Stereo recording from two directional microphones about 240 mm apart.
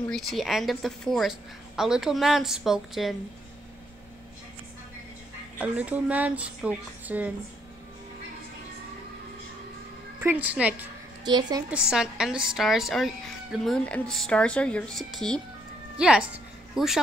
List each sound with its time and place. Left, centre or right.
0.1 s a woman's voice: centre
5.6 s a woman's voice: centre
10.1 s a woman's voice: centre
11.2 s a woman's voice: centre
11.7 s a woman's voice: centre